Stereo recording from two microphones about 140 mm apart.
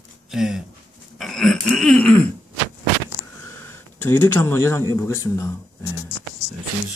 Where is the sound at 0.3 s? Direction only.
Centre (ahead or behind).